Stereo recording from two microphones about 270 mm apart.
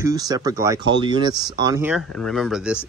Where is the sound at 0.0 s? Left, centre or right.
Centre.